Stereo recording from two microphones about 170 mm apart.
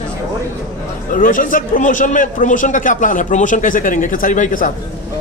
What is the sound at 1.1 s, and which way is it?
A man's voice, 55° left (ahead or behind).